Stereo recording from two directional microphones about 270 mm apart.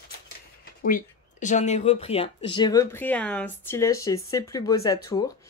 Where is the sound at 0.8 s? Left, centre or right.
Left.